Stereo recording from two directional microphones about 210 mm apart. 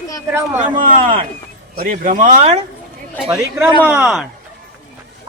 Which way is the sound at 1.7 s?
40° right (ahead or behind).